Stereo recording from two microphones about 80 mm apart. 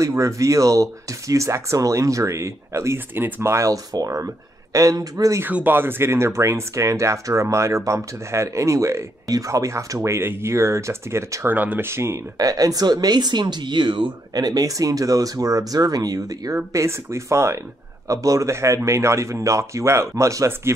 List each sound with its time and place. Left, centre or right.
0.0 s speech: right
5.4 s speech: right
11.4 s speech: right
11.9 s speech: right
12.4 s speech: right
14.3 s speech: right
16.7 s speech: right